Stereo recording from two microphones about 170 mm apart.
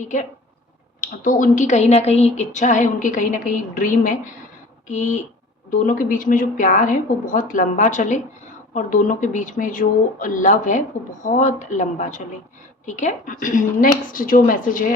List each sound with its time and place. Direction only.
0.0 s speech: 45° left (ahead or behind)